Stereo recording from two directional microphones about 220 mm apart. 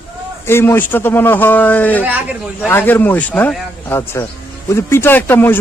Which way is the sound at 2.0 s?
5° right (ahead or behind).